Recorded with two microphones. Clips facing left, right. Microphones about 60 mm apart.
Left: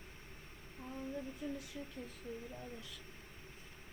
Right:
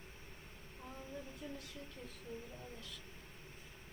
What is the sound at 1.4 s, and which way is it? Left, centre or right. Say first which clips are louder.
Speech: left 6 dB; left.